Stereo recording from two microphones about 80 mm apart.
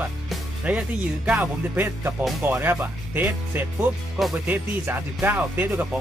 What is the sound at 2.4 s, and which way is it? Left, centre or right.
Speech, right.